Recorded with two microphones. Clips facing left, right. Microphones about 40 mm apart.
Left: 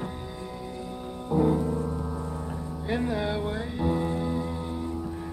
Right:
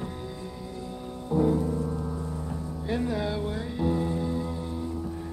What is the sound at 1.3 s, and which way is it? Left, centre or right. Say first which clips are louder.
Music: left 1 dB; centre.